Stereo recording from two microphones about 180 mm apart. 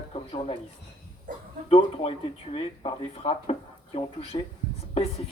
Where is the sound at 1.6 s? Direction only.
30° left (ahead or behind).